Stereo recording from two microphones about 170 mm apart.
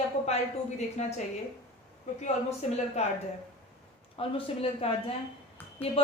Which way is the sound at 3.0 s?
40° left (ahead or behind).